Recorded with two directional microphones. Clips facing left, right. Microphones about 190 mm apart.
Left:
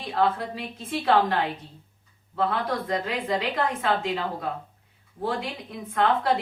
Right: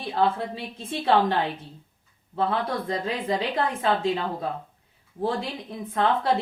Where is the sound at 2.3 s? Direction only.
30° right (ahead or behind).